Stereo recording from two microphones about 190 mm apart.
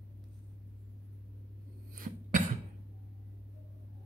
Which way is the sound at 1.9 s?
45° right (ahead or behind).